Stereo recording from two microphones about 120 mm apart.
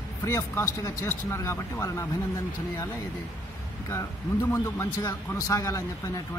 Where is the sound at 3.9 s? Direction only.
20° left (ahead or behind).